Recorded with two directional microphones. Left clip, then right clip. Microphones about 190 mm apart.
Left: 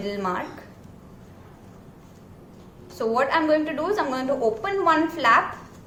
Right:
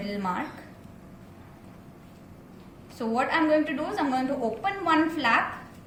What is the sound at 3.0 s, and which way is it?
A woman's voice, 50° left (ahead or behind).